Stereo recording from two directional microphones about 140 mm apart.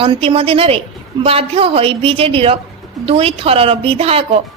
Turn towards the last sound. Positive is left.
turn(degrees=-45)  # may be behind; listen again after turning